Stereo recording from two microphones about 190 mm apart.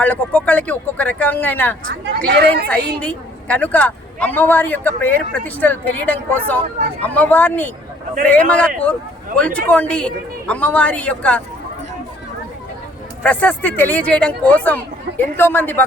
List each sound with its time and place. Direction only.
0.0 s speech: 10° left (ahead or behind)
1.8 s speech: 55° right (ahead or behind)
3.0 s speech: 10° left (ahead or behind)
13.2 s speech: 10° left (ahead or behind)